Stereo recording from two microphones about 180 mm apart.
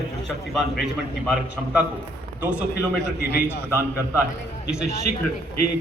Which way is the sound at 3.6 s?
10° right (ahead or behind).